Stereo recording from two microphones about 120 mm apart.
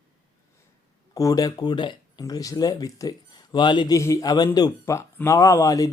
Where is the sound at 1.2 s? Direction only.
30° left (ahead or behind).